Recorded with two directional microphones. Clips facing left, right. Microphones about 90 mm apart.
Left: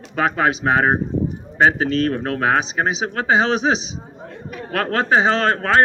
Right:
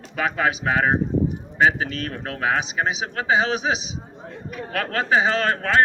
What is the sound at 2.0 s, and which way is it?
Speech, 50° left (ahead or behind).